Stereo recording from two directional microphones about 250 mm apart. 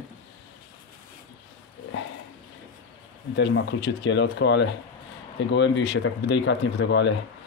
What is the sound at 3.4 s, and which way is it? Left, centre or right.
Speech, left.